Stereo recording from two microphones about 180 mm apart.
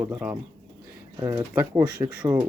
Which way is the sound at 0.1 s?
5° right (ahead or behind).